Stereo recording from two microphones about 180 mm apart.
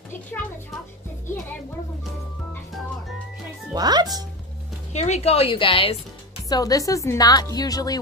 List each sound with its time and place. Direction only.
3.7 s speech: 25° right (ahead or behind)
4.9 s a woman's voice: 40° left (ahead or behind)
6.5 s a woman's voice: 20° left (ahead or behind)